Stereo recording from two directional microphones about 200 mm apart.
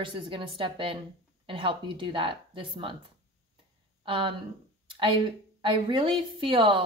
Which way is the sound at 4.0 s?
25° right (ahead or behind).